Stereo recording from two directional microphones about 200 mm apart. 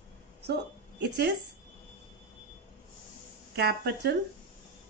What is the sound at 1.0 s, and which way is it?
Speech, 60° right (ahead or behind).